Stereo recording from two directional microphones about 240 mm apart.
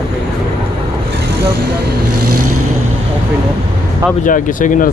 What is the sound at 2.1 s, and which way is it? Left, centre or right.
Vehicle, right.